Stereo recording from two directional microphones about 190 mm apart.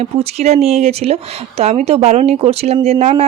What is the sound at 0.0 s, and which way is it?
Speech, 35° right (ahead or behind).